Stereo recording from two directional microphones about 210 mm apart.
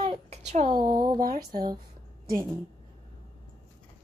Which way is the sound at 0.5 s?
35° right (ahead or behind).